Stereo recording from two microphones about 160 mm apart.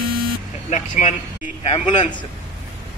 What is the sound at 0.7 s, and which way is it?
Speech, 50° left (ahead or behind).